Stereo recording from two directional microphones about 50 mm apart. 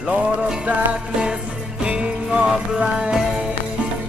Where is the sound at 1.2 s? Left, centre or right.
Centre.